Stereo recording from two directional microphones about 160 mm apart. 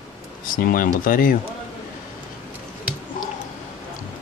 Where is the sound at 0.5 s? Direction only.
60° left (ahead or behind).